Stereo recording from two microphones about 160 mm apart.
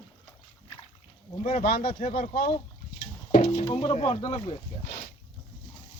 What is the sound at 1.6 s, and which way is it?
Speech, 70° left (ahead or behind).